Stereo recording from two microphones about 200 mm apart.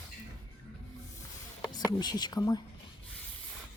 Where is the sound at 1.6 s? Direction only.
20° left (ahead or behind).